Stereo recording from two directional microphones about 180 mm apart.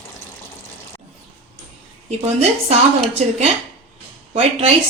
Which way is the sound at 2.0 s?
35° right (ahead or behind).